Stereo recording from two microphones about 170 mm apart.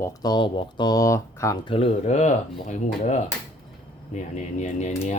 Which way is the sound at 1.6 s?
35° left (ahead or behind).